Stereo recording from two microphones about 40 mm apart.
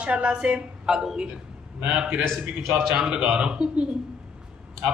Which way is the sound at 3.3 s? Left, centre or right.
Right.